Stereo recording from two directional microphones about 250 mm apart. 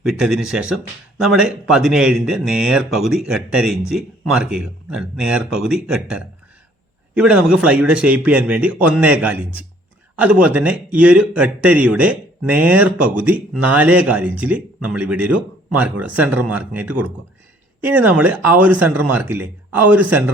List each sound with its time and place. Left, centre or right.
0.0 s a man's voice: centre